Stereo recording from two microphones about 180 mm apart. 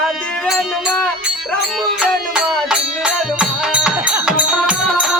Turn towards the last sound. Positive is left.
turn(degrees=-5)  # may be behind; listen again after turning